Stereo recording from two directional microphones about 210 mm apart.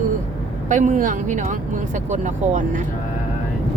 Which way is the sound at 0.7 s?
35° right (ahead or behind).